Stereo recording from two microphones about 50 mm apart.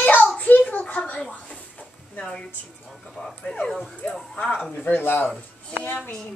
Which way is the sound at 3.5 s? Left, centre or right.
Left.